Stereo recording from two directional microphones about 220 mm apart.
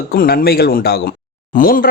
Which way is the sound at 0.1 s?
40° left (ahead or behind).